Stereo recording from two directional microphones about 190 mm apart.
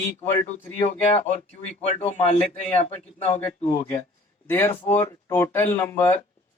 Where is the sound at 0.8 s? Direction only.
35° left (ahead or behind).